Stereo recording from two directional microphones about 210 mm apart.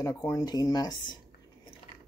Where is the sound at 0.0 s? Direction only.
15° left (ahead or behind).